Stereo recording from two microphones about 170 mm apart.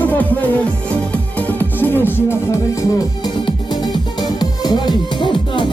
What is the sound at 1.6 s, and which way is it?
Music, 10° left (ahead or behind).